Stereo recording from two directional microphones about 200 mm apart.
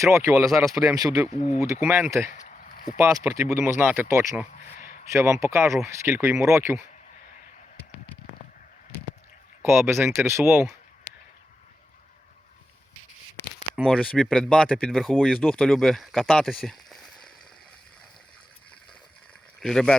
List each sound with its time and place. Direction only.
0.0 s speech: 15° right (ahead or behind)
1.3 s speech: 35° left (ahead or behind)
1.6 s speech: 15° right (ahead or behind)
2.3 s a sound: 40° left (ahead or behind)
3.0 s speech: 15° right (ahead or behind)
9.6 s speech: 15° right (ahead or behind)
13.7 s speech: 5° left (ahead or behind)
19.6 s speech: 5° left (ahead or behind)